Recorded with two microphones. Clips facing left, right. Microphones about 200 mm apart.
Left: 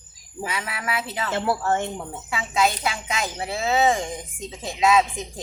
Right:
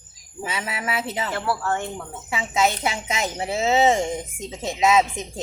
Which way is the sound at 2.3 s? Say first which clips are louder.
Right 1 dB; 20° right (ahead or behind).